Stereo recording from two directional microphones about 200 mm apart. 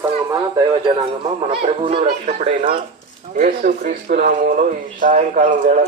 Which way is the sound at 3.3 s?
40° right (ahead or behind).